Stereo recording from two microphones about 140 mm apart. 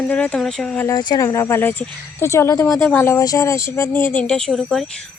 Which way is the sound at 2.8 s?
10° left (ahead or behind).